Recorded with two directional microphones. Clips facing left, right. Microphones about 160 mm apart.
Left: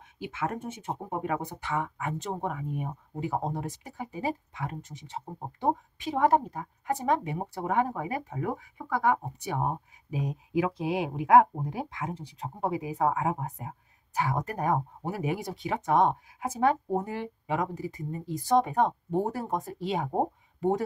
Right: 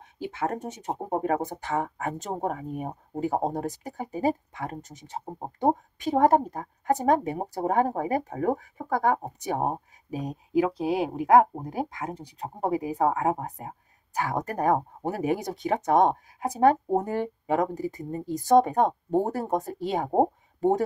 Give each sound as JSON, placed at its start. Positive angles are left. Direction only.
{"t": 0.2, "sound": "speech", "side_deg": -40}